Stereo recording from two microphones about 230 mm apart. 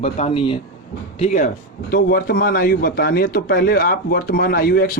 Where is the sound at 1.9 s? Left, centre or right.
Left.